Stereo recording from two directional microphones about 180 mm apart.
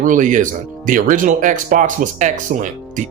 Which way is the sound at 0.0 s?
45° right (ahead or behind).